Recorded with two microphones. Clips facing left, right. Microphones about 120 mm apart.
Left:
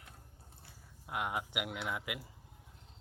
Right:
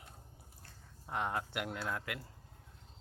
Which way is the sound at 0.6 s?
10° left (ahead or behind).